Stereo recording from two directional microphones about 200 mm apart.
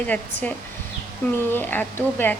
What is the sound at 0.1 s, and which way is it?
Speech, 5° left (ahead or behind).